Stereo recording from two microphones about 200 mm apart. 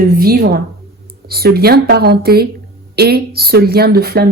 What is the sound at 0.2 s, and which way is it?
Speech, 50° right (ahead or behind).